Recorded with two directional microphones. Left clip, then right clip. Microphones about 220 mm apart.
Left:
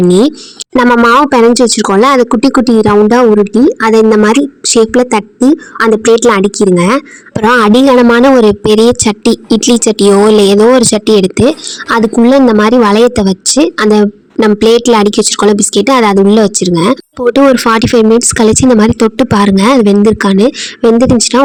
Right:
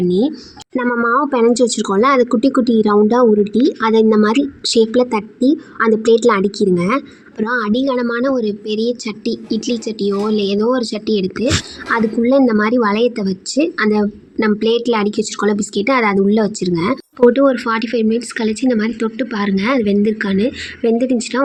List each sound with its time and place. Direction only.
0.1 s speech: 50° left (ahead or behind)